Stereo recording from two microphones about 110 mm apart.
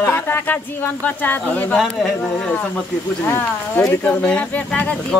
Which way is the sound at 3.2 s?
15° left (ahead or behind).